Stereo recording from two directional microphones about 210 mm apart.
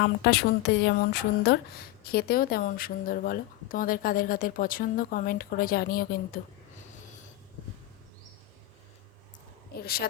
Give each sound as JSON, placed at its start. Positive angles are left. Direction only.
{"t": 0.0, "sound": "speech", "side_deg": 55}
{"t": 9.8, "sound": "speech", "side_deg": 45}